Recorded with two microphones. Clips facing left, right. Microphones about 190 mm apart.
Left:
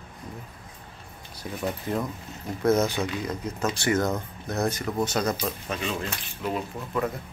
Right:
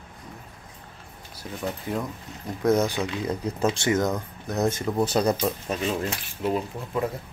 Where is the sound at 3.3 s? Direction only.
30° right (ahead or behind).